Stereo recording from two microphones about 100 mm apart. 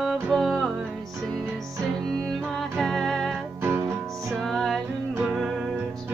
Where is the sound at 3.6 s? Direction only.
25° right (ahead or behind).